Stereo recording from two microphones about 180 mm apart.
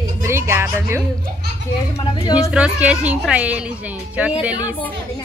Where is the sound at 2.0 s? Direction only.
25° left (ahead or behind).